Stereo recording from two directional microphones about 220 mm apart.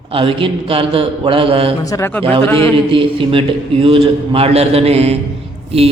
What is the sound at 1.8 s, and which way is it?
Speech, 15° left (ahead or behind).